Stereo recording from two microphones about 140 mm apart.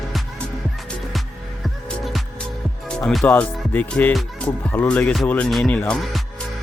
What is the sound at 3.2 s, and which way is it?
Music, 15° left (ahead or behind).